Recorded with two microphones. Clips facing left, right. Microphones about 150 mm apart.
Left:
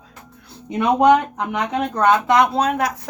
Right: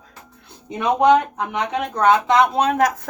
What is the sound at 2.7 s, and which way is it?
Speech, 45° right (ahead or behind).